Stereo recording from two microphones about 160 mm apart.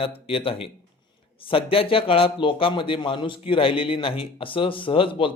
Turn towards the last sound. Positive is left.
turn(degrees=35)  # may be behind; listen again after turning